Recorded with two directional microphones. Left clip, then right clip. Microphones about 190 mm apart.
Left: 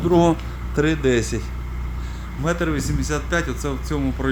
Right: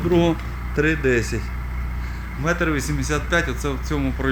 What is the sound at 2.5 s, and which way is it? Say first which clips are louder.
Speech: right 1 dB; 5° left (ahead or behind).